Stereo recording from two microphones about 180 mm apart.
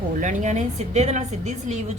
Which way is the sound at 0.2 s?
45° right (ahead or behind).